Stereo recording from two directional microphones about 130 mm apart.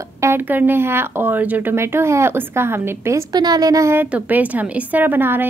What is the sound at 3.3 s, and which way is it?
Speech, 30° right (ahead or behind).